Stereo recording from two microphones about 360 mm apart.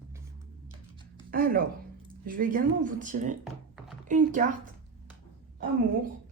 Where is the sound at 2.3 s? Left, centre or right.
Right.